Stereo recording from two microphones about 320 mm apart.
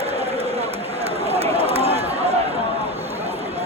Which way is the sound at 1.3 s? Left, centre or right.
Centre.